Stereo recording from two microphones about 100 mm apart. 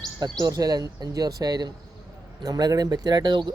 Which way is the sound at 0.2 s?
40° right (ahead or behind).